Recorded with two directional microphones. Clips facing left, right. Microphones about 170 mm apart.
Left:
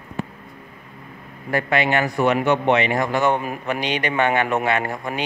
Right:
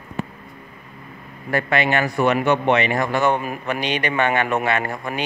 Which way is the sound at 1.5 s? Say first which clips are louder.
Even; 15° left (ahead or behind).